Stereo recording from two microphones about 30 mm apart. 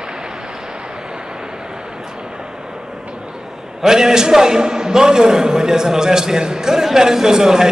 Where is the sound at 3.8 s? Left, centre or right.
Centre.